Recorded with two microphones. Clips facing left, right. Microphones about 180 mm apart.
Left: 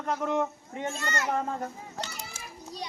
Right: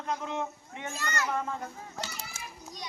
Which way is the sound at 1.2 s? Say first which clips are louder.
Left 3 dB; 40° left (ahead or behind).